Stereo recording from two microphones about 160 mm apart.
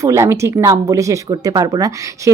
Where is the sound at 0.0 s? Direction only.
20° right (ahead or behind).